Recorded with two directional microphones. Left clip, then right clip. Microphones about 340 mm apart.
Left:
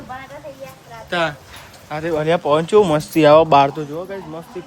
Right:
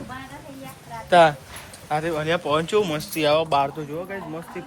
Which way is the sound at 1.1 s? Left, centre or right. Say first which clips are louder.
Right 6 dB; centre.